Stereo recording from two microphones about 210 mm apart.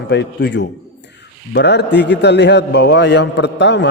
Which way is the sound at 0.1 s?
55° left (ahead or behind).